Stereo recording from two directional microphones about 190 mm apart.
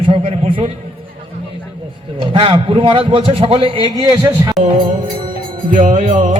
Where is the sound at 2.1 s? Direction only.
25° right (ahead or behind).